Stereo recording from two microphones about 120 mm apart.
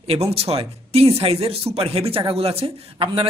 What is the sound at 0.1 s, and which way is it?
Speech, 55° right (ahead or behind).